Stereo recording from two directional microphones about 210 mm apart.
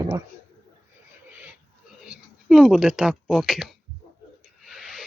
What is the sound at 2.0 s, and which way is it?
Speech, 5° right (ahead or behind).